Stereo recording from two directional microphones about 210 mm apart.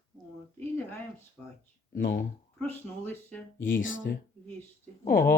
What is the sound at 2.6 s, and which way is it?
Speech, 10° left (ahead or behind).